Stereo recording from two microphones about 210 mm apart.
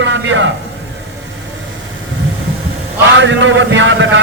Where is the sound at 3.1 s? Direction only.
60° right (ahead or behind).